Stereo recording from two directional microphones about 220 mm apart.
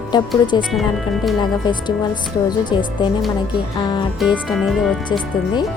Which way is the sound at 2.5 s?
20° left (ahead or behind).